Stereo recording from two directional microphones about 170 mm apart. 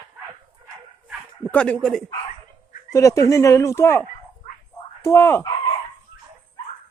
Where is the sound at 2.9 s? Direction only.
20° left (ahead or behind).